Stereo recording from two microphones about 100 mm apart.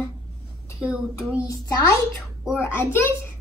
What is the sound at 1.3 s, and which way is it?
Speech, 35° left (ahead or behind).